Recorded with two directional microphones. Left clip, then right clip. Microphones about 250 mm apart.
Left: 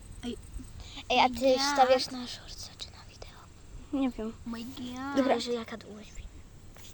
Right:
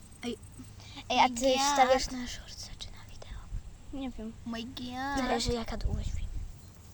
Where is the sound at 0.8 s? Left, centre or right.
Right.